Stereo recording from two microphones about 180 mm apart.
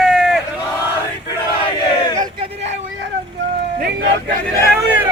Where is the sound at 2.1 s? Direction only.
20° right (ahead or behind).